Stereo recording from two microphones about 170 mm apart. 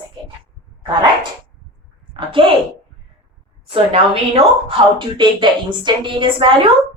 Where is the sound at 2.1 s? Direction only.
30° right (ahead or behind).